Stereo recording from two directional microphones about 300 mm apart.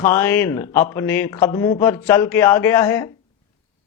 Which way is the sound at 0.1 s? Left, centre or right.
Centre.